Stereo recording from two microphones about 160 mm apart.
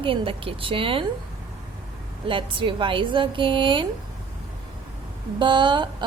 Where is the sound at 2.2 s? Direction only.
35° right (ahead or behind).